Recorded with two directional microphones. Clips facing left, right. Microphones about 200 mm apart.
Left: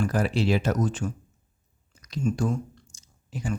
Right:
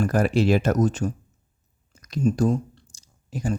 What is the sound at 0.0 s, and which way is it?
Speech, 45° right (ahead or behind).